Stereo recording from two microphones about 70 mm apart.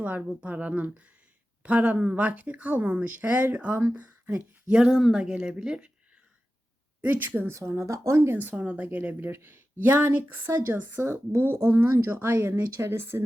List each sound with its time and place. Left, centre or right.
0.0 s speech: right
4.7 s speech: centre
7.0 s speech: right
7.5 s speech: right